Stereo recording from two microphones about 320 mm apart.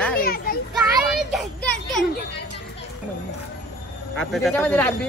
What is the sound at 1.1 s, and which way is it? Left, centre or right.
Children playing, centre.